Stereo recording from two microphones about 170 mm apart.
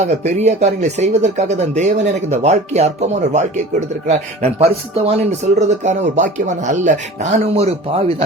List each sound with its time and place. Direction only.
0.0 s speech: 40° right (ahead or behind)